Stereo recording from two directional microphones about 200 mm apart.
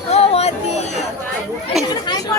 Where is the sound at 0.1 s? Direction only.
30° left (ahead or behind).